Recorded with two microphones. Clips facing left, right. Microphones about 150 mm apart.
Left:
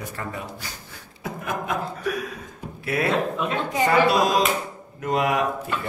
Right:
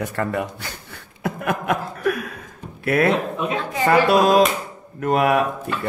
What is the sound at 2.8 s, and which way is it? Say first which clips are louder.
Speech: right 4 dB; 60° right (ahead or behind).